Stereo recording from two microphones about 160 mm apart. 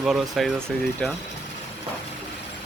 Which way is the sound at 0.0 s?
Centre (ahead or behind).